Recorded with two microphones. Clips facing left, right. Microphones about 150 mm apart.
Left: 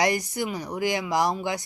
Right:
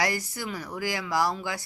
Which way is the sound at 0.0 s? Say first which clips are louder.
Left 5 dB; 20° left (ahead or behind).